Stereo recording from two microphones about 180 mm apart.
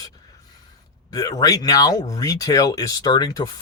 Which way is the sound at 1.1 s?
20° left (ahead or behind).